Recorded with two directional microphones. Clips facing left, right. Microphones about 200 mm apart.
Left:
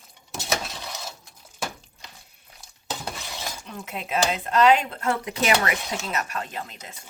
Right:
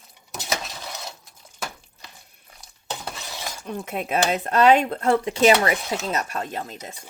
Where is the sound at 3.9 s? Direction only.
50° right (ahead or behind).